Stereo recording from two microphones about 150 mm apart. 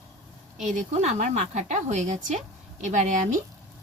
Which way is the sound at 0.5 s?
50° right (ahead or behind).